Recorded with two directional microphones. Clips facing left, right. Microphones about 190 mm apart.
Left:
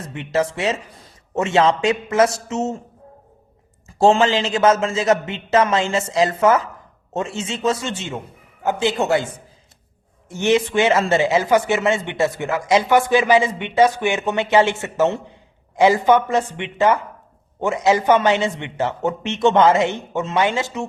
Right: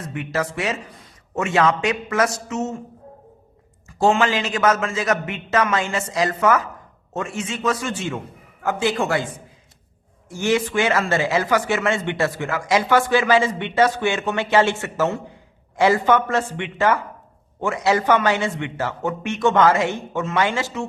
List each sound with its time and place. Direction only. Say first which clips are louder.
0.0 s speech: left 4 dB; 25° left (ahead or behind)
3.8 s speech: left 3 dB; 30° left (ahead or behind)
10.2 s speech: left 3 dB; 25° left (ahead or behind)